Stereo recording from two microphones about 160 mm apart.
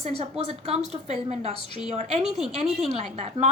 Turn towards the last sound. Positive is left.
turn(degrees=-45)  # may be behind; listen again after turning